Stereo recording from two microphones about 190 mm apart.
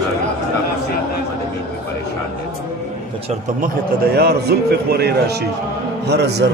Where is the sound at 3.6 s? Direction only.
55° right (ahead or behind).